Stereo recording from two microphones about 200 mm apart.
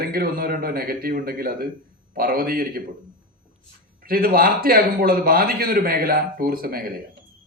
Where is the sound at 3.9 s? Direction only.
50° right (ahead or behind).